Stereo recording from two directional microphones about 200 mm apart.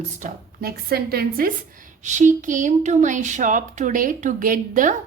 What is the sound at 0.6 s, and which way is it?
A woman's voice, 50° right (ahead or behind).